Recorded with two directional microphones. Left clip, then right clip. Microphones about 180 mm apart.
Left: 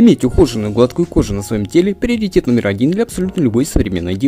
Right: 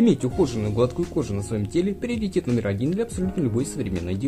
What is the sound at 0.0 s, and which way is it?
Speech, 40° left (ahead or behind).